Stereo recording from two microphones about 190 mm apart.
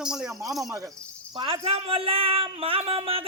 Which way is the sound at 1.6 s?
30° right (ahead or behind).